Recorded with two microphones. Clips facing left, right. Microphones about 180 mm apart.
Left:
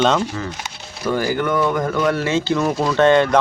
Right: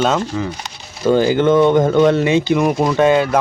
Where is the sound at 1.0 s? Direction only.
25° right (ahead or behind).